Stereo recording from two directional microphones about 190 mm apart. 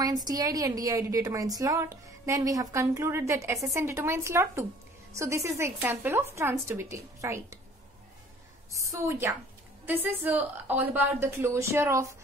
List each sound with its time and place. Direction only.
0.0 s a woman's voice: 20° right (ahead or behind)
8.7 s a woman's voice: 15° right (ahead or behind)